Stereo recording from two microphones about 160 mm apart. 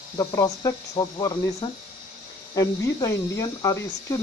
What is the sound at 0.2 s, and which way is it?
Speech, 20° left (ahead or behind).